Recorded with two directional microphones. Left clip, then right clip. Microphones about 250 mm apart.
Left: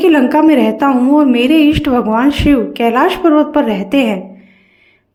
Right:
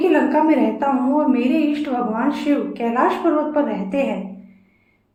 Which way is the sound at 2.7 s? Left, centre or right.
Left.